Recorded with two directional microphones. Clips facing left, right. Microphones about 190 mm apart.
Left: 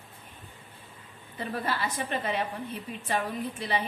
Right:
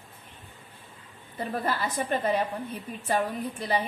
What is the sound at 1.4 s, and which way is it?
A woman's voice, 40° right (ahead or behind).